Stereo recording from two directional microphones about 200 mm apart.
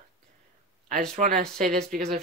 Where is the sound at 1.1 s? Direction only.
45° right (ahead or behind).